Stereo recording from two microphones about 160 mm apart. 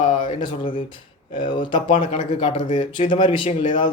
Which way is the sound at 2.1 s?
40° left (ahead or behind).